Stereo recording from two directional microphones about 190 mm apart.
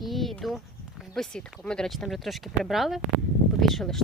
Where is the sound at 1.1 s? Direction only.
5° left (ahead or behind).